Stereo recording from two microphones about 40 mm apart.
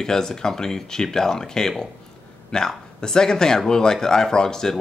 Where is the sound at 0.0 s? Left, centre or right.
Centre.